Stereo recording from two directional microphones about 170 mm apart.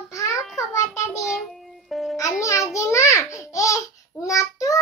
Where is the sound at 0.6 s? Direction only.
20° left (ahead or behind).